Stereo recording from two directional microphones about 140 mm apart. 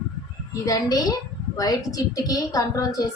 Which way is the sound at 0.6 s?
25° left (ahead or behind).